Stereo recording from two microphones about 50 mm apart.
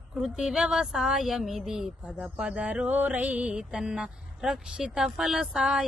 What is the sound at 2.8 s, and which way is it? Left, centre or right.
Speech, right.